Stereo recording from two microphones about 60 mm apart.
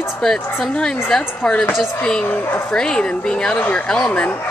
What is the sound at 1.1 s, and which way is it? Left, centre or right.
Speech, centre.